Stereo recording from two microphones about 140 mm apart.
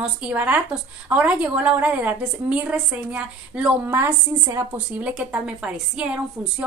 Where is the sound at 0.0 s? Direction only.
10° right (ahead or behind).